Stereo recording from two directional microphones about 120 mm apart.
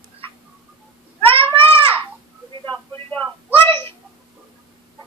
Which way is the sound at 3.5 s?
20° left (ahead or behind).